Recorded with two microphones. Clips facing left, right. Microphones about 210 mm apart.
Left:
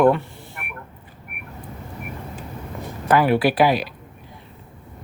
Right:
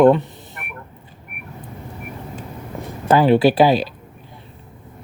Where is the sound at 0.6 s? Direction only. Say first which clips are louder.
Even; centre (ahead or behind).